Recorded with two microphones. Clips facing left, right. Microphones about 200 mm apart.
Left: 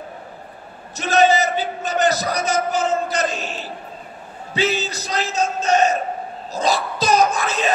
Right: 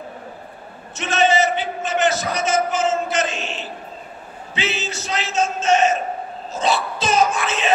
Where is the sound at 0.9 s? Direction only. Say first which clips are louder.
Left 2 dB; 35° left (ahead or behind).